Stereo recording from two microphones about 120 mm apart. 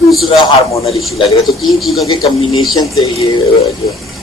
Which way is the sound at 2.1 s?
35° left (ahead or behind).